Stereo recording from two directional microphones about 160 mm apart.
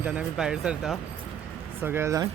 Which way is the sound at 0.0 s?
5° right (ahead or behind).